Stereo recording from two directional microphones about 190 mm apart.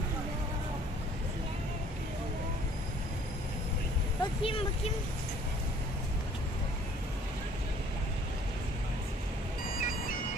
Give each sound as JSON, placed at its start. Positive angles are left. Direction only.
{"t": 4.2, "sound": "vehicle", "side_deg": 30}
{"t": 9.7, "sound": "music", "side_deg": 50}